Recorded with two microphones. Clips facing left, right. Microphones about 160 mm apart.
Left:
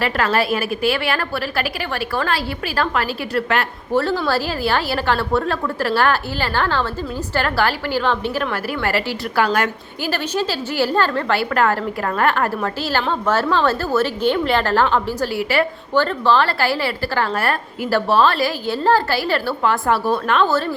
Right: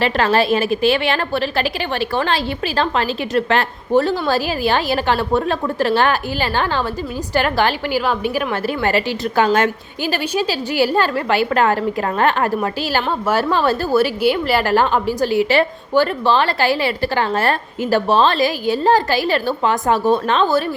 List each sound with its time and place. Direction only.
0.0 s a woman's voice: 25° right (ahead or behind)